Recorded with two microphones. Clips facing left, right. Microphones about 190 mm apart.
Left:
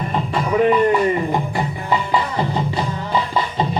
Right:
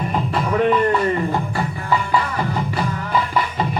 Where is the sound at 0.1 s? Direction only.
Centre (ahead or behind).